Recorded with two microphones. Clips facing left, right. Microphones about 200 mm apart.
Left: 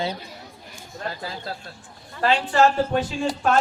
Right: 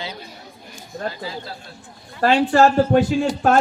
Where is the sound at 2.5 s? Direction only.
40° right (ahead or behind).